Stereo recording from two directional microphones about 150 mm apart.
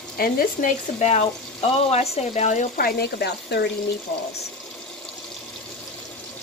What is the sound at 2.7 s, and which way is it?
Speech, 85° left.